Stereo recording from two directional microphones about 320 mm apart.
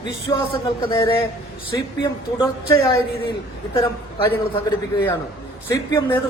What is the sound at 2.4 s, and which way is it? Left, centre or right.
Speech, centre.